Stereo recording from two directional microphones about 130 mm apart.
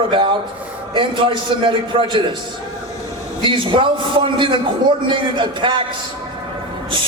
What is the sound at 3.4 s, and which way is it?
A man's voice, 40° right (ahead or behind).